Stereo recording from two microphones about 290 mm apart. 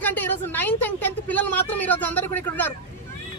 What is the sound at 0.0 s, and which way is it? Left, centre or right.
Speech, centre.